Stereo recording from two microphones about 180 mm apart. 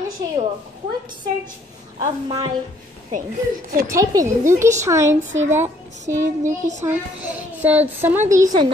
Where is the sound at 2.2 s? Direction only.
30° right (ahead or behind).